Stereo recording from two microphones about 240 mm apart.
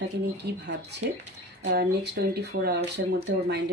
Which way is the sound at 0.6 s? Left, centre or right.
Right.